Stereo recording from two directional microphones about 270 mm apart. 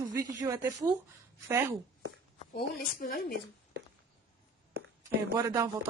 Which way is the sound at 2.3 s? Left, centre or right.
Left.